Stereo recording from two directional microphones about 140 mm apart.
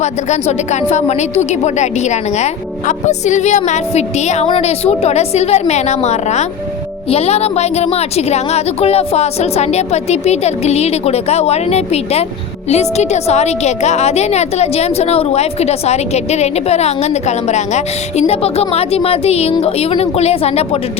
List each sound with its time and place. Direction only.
0.0 s a woman's voice: 55° left (ahead or behind)